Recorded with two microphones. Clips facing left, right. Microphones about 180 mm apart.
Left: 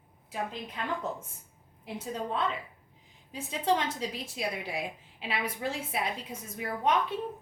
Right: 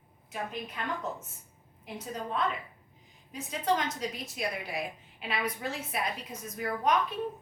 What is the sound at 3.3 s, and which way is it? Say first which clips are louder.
A woman's voice: left 1 dB; 25° left (ahead or behind).